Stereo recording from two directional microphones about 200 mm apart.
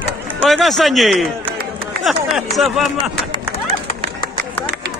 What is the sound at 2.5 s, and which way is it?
Speech, centre (ahead or behind).